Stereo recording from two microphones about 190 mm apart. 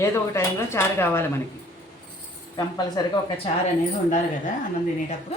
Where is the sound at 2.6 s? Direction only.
20° left (ahead or behind).